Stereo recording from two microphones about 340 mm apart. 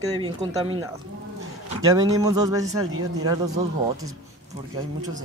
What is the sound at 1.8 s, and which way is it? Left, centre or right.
Speech, centre.